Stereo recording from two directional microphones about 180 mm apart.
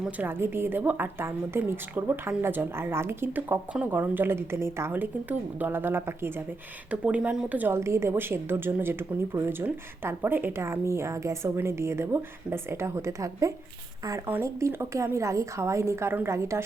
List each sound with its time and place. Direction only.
0.0 s a woman's voice: 10° right (ahead or behind)